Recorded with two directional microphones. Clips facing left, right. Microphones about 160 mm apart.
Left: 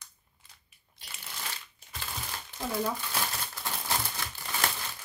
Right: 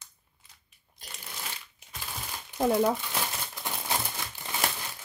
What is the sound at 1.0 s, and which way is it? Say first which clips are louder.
Shuffling cards: right 2 dB; 45° right (ahead or behind).